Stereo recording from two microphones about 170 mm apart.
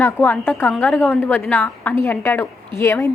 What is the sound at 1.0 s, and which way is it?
A woman's voice, 15° left (ahead or behind).